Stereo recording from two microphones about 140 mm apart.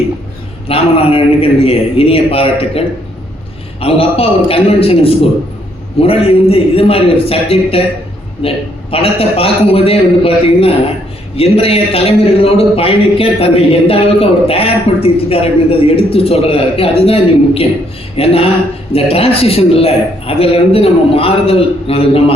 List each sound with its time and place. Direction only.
0.7 s a man's voice: 45° left (ahead or behind)